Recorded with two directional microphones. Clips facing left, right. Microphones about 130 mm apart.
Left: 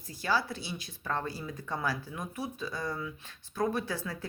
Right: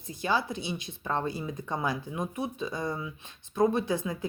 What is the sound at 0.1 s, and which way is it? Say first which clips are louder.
Speech: right 2 dB; 20° right (ahead or behind).